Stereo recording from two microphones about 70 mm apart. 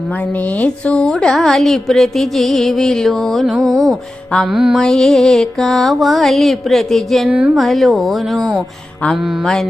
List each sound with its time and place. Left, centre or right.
0.3 s music: left; by 4.8 s centre
4.8 s music: centre
7.3 s a woman's voice: centre
7.5 s music: centre